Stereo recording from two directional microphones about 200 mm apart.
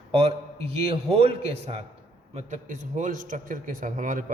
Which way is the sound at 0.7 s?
30° right (ahead or behind).